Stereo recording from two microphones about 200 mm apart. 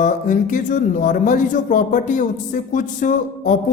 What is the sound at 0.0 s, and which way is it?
Speech, 40° left (ahead or behind).